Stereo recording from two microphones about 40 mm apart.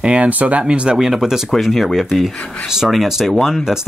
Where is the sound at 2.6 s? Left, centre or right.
Centre.